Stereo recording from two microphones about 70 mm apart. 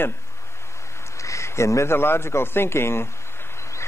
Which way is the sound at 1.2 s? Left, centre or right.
Left.